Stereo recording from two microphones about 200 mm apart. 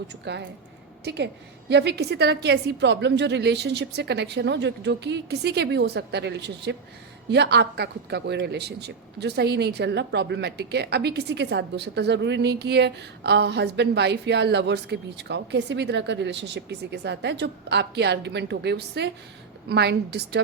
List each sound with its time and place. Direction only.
0.3 s a woman's voice: 60° right (ahead or behind)